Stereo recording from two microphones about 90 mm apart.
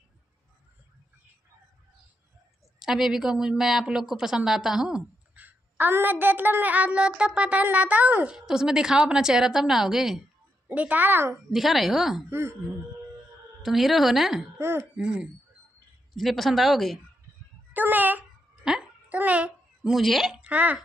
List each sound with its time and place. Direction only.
2.8 s a woman's voice: 5° right (ahead or behind)
5.3 s a woman's voice: 20° right (ahead or behind); by 10.2 s 5° right (ahead or behind)
10.7 s a woman's voice: 15° right (ahead or behind)
11.5 s a woman's voice: centre (ahead or behind)
12.3 s a woman's voice: 30° right (ahead or behind)
13.6 s a woman's voice: centre (ahead or behind)
16.2 s a woman's voice: centre (ahead or behind)
17.7 s a woman's voice: 20° right (ahead or behind)
18.6 s a sound: 5° right (ahead or behind)
19.0 s babbling: 15° right (ahead or behind)
19.9 s a woman's voice: centre (ahead or behind)
20.3 s speech: 15° right (ahead or behind)